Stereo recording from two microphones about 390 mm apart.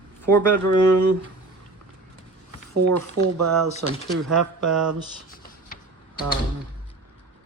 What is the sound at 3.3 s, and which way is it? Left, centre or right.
Speech, right.